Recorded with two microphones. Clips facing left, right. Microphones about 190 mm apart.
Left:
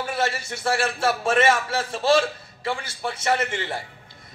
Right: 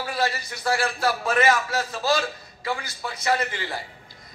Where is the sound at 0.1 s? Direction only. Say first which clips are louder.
Right 1 dB; 25° left (ahead or behind).